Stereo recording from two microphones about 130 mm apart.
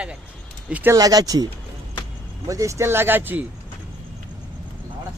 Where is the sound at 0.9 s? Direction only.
30° right (ahead or behind).